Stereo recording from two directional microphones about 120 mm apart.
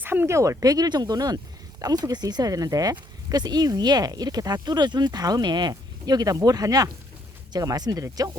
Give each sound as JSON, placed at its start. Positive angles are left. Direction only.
{"t": 0.0, "sound": "speech", "side_deg": -15}